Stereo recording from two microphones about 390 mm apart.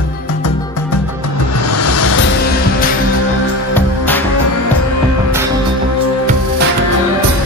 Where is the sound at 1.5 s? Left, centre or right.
Left.